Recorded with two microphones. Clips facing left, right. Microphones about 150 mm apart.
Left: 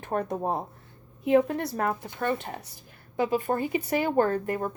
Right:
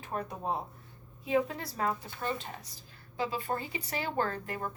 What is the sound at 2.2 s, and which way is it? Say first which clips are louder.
A woman's voice: left 7 dB; 60° left (ahead or behind).